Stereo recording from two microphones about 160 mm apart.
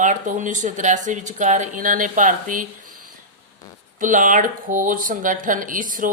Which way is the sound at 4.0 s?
55° right (ahead or behind).